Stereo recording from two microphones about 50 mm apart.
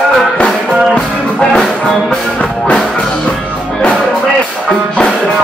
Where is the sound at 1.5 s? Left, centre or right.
Centre.